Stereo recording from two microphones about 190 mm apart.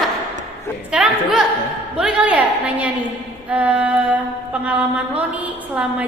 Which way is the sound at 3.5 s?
5° right (ahead or behind).